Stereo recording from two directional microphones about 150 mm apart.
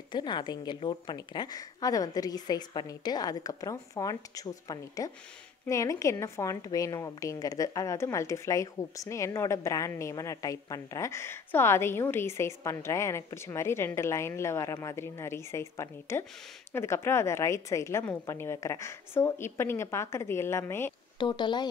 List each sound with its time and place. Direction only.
0.1 s a woman's voice: 30° left (ahead or behind)
21.2 s speech: 30° left (ahead or behind)